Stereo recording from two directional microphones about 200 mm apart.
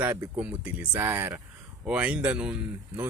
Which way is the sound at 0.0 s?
10° right (ahead or behind).